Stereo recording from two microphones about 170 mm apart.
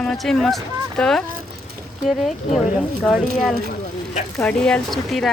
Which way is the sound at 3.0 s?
5° left (ahead or behind).